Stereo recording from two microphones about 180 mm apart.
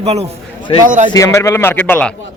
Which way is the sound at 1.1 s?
15° left (ahead or behind).